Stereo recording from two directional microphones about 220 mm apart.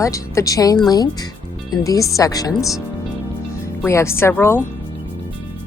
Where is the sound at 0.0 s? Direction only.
15° left (ahead or behind).